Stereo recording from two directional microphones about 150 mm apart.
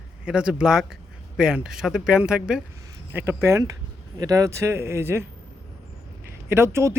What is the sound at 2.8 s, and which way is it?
Speech, 15° right (ahead or behind).